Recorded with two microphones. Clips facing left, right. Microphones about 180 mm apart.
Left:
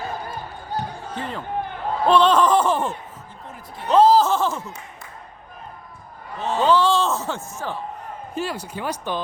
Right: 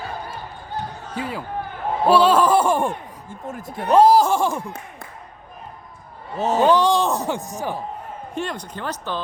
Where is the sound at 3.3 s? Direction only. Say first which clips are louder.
Right 7 dB; 45° right (ahead or behind).